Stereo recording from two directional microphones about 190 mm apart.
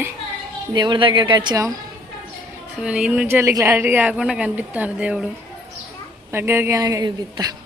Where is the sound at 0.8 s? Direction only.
25° right (ahead or behind).